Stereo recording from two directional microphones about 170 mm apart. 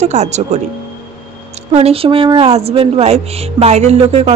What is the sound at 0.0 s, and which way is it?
Speech, 40° right (ahead or behind).